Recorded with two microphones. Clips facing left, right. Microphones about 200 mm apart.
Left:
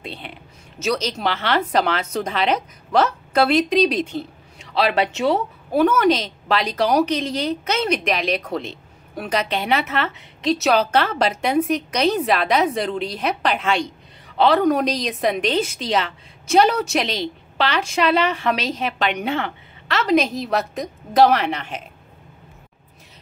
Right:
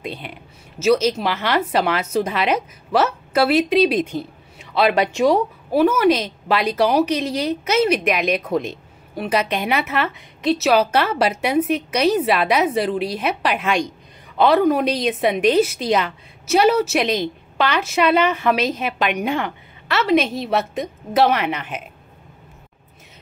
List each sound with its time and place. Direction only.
0.0 s a woman's voice: 25° left (ahead or behind)
0.7 s a woman's voice: 5° right (ahead or behind)